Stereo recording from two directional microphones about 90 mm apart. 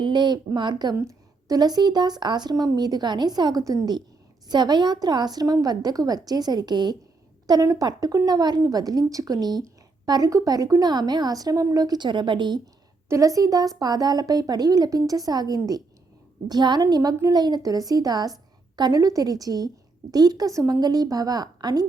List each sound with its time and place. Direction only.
0.0 s speech: 55° right (ahead or behind)
0.9 s a woman's voice: 40° right (ahead or behind); by 12.5 s 60° right (ahead or behind)
13.1 s a woman's voice: 35° right (ahead or behind)